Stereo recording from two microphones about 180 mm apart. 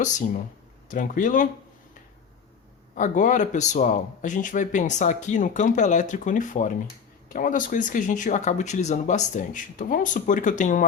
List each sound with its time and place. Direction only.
0.0 s speech: 45° left (ahead or behind)
2.9 s speech: 45° left (ahead or behind)